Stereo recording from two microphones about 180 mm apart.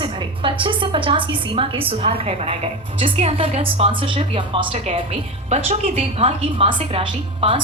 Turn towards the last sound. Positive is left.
turn(degrees=-30)  # may be behind; listen again after turning